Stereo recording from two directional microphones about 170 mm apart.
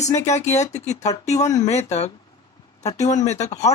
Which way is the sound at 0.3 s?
40° left (ahead or behind).